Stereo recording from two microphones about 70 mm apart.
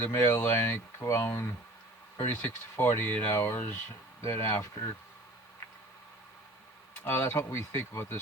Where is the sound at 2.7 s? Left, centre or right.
Left.